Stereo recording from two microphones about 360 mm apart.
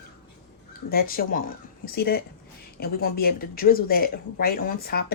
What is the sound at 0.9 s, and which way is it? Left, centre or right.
Speech, left.